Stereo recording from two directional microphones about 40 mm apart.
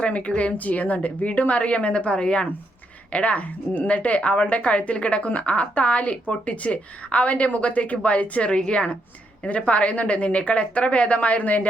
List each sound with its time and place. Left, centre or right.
0.0 s a woman's voice: left